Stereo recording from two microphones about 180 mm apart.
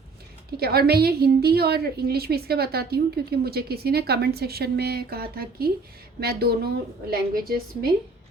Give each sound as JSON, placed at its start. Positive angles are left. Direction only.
{"t": 0.5, "sound": "a woman's voice", "side_deg": -60}